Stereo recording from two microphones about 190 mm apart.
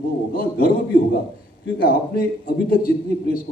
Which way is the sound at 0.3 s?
50° left (ahead or behind).